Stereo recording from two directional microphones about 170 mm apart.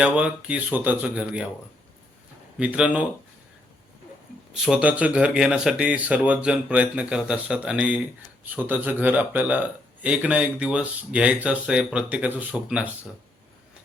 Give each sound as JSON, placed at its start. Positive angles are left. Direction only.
{"t": 0.0, "sound": "speech", "side_deg": -5}
{"t": 2.6, "sound": "speech", "side_deg": -5}
{"t": 4.5, "sound": "speech", "side_deg": -5}